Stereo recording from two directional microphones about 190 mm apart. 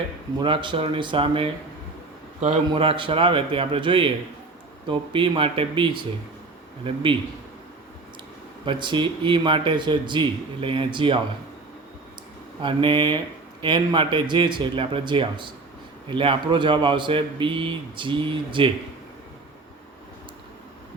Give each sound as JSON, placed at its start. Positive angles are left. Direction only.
{"t": 0.3, "sound": "speech", "side_deg": -25}
{"t": 8.6, "sound": "speech", "side_deg": -25}
{"t": 12.6, "sound": "speech", "side_deg": -25}